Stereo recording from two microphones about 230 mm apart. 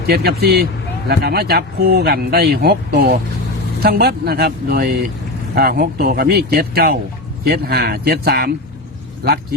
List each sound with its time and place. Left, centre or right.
0.0 s speech: right